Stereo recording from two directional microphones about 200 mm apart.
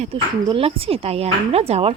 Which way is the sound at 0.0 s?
25° right (ahead or behind).